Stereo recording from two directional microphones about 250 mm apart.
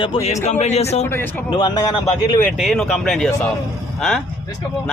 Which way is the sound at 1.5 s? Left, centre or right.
Centre.